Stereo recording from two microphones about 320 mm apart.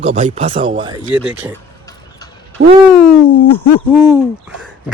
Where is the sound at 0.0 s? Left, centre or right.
Right.